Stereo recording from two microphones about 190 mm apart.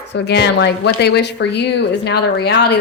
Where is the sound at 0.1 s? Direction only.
60° left (ahead or behind).